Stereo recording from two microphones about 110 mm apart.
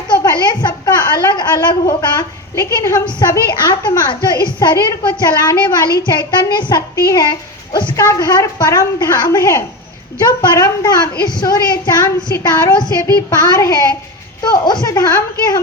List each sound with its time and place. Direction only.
0.1 s a sound: 40° left (ahead or behind)
2.6 s a woman's voice: 30° left (ahead or behind)
3.2 s a woman's voice: 40° left (ahead or behind)